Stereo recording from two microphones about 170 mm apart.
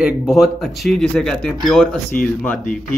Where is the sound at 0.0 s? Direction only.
Centre (ahead or behind).